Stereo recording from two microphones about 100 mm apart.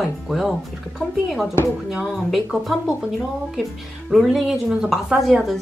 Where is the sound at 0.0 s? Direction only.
Centre (ahead or behind).